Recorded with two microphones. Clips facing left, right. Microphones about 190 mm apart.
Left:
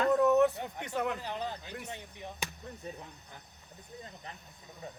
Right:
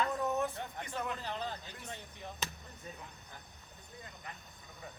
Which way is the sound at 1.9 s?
15° left (ahead or behind).